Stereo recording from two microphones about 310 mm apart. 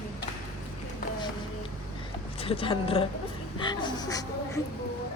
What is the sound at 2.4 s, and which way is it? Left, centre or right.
Speech, centre.